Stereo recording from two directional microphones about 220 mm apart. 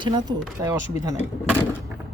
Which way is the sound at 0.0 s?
20° right (ahead or behind).